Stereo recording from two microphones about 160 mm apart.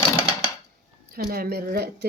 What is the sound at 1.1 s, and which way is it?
Speech, 70° right (ahead or behind).